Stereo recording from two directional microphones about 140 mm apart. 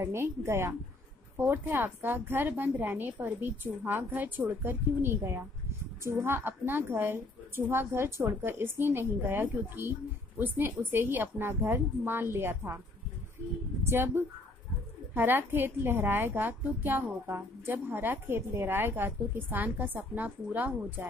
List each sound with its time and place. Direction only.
0.0 s a woman's voice: 15° right (ahead or behind)
13.8 s a woman's voice: 15° right (ahead or behind)